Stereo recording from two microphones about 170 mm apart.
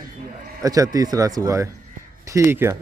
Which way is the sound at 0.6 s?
20° right (ahead or behind).